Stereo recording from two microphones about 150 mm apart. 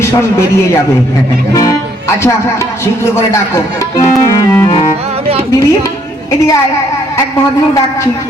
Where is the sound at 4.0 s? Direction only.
20° left (ahead or behind).